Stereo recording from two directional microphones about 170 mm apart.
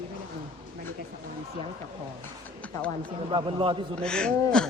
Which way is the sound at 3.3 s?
30° right (ahead or behind).